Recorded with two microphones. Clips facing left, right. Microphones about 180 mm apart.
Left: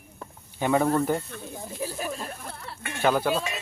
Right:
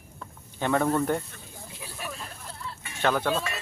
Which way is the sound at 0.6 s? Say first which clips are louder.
Left 2 dB; 10° left (ahead or behind).